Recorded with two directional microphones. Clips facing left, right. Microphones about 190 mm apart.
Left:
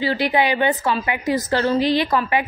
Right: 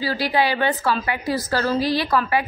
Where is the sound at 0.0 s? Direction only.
20° left (ahead or behind).